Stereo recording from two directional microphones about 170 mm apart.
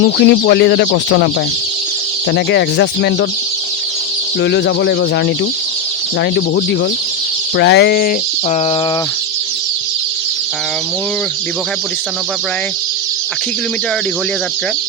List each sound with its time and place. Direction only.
0.0 s speech: 80° left
2.3 s speech: 90° left
4.4 s speech: 90° left
7.5 s a sound: 80° left; by 8.1 s 65° left (ahead or behind)